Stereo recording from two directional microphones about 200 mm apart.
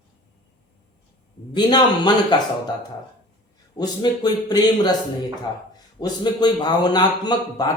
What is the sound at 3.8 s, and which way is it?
A man's voice, 20° left (ahead or behind).